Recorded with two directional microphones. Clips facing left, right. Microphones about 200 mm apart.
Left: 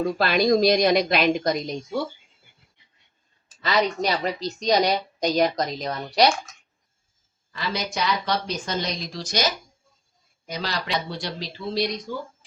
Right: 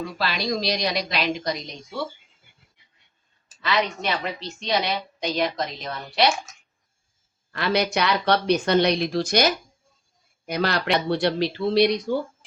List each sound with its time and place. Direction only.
0.0 s a woman's voice: 50° left (ahead or behind)
3.6 s a woman's voice: 40° left (ahead or behind)
7.5 s speech: 65° right (ahead or behind)